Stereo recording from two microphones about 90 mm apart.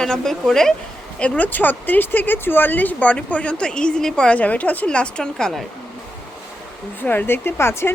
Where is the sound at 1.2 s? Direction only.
20° left (ahead or behind).